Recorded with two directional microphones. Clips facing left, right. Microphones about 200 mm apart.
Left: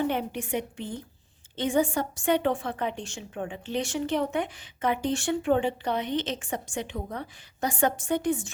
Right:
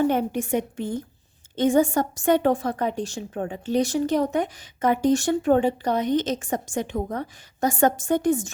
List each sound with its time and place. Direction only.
0.0 s a woman's voice: 45° right (ahead or behind)